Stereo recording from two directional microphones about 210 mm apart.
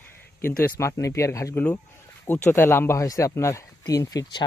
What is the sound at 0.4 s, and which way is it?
Speech, 10° left (ahead or behind).